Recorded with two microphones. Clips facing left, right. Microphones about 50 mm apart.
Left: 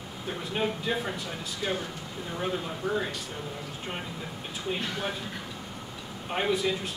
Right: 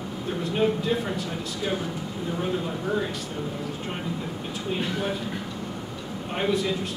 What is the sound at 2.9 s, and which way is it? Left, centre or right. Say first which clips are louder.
Speech: right 2 dB; centre.